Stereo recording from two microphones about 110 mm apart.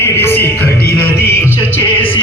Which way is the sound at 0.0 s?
20° left (ahead or behind).